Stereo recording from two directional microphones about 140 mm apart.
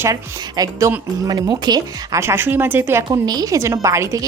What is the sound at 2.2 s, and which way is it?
Speech, 15° right (ahead or behind).